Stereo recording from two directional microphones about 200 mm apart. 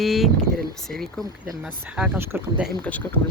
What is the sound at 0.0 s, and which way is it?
Speech, centre (ahead or behind).